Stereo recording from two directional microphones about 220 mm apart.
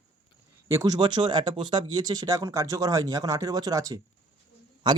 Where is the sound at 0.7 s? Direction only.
15° right (ahead or behind).